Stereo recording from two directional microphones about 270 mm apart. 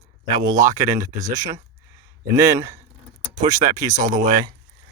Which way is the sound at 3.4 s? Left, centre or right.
Right.